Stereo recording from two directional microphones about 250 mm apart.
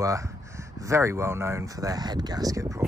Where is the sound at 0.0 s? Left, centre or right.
Centre.